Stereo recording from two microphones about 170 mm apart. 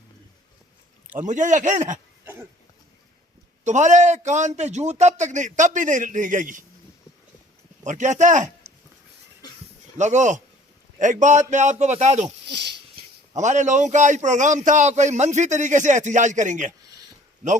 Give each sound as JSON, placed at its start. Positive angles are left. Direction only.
{"t": 1.1, "sound": "a man's voice", "side_deg": -45}
{"t": 3.6, "sound": "a man's voice", "side_deg": -45}
{"t": 7.9, "sound": "a man's voice", "side_deg": -45}
{"t": 10.0, "sound": "a man's voice", "side_deg": -45}
{"t": 13.3, "sound": "a man's voice", "side_deg": -45}